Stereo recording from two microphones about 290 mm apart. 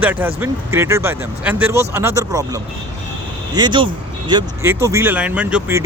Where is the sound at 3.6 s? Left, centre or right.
Centre.